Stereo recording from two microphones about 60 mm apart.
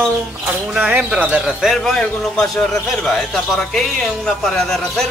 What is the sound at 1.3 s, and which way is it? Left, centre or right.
Speech, centre.